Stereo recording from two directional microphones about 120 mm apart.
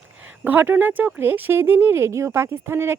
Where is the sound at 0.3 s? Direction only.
15° right (ahead or behind).